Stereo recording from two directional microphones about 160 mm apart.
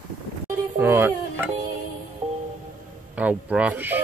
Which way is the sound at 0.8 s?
15° right (ahead or behind).